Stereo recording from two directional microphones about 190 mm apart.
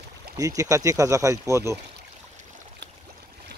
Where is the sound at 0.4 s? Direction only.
15° right (ahead or behind).